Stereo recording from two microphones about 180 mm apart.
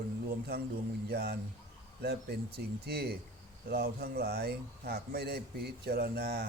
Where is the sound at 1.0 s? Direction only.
65° right (ahead or behind).